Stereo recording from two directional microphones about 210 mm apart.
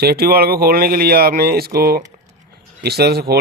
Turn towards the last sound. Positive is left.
turn(degrees=-50)  # may be behind; listen again after turning